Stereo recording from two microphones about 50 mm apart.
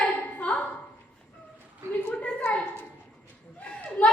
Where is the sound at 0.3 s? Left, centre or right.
Left.